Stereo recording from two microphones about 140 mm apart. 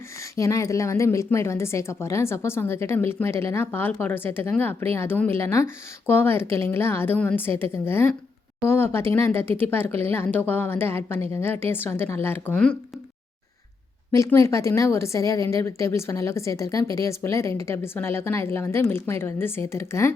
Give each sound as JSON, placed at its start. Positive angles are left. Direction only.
{"t": 0.2, "sound": "a woman's voice", "side_deg": 20}
{"t": 14.2, "sound": "a woman's voice", "side_deg": 20}